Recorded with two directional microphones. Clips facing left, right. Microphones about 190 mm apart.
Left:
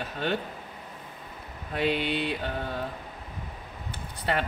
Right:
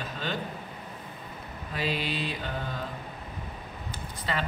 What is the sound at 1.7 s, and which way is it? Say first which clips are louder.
Speech: left 4 dB; 60° left (ahead or behind).